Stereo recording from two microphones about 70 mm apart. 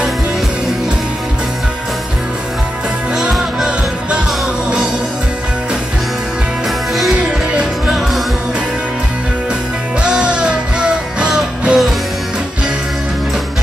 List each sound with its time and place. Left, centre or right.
3.2 s music: centre
7.0 s music: centre
10.0 s music: centre